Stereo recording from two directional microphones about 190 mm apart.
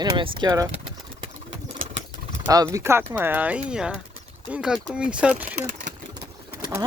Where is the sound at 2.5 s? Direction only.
20° right (ahead or behind).